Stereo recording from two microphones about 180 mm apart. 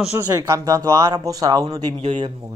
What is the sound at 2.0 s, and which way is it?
Speech, 30° right (ahead or behind).